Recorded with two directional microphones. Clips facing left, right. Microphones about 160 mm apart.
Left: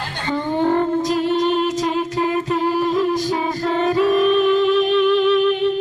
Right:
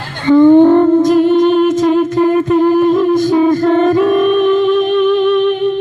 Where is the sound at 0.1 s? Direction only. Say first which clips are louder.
Right 18 dB; 55° right (ahead or behind).